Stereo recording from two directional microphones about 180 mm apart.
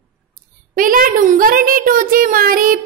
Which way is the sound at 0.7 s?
50° right (ahead or behind).